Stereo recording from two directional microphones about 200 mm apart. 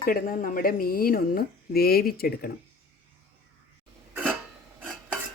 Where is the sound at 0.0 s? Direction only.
45° left (ahead or behind).